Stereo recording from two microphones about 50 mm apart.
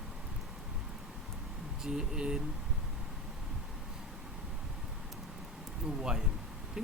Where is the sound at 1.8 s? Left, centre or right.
Centre.